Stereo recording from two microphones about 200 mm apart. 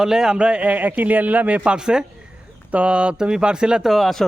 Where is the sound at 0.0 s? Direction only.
5° right (ahead or behind).